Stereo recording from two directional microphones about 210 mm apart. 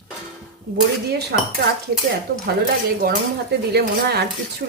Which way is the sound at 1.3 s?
50° right (ahead or behind).